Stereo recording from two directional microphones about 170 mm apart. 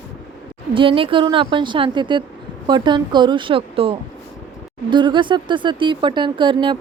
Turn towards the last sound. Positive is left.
turn(degrees=-30)  # may be behind; listen again after turning